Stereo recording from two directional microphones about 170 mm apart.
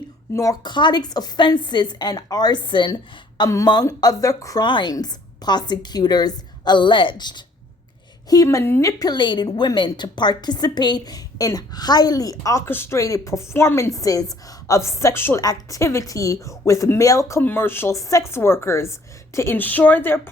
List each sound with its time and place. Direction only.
0.3 s a woman's voice: 20° left (ahead or behind)